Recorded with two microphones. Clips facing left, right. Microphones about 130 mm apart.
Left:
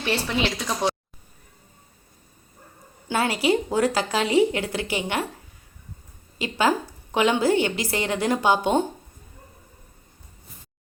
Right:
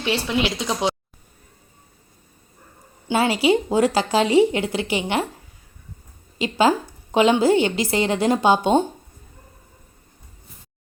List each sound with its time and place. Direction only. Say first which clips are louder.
0.0 s speech: right 2 dB; 15° right (ahead or behind)
3.1 s a woman's voice: right 4 dB; 25° right (ahead or behind)
6.4 s a woman's voice: right 4 dB; 25° right (ahead or behind)